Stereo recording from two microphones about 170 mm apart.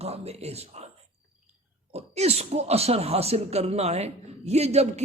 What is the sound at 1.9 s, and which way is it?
Speech, 40° right (ahead or behind).